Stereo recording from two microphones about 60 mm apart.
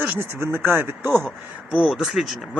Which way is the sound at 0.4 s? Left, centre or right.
Right.